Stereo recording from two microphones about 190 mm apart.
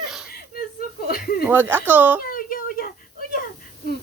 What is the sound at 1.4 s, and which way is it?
Speech, 10° right (ahead or behind).